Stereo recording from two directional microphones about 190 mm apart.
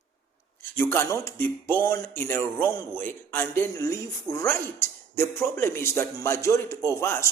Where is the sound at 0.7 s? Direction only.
10° left (ahead or behind).